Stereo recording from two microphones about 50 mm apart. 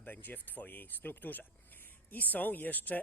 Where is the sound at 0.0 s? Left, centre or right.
Left.